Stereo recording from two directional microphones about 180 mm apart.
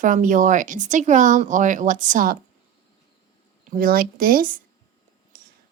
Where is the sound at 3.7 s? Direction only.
50° right (ahead or behind).